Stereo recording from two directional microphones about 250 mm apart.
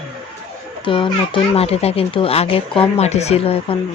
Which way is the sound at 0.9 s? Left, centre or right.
Left.